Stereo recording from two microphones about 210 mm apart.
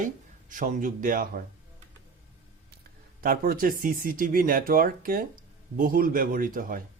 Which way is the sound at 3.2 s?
45° right (ahead or behind).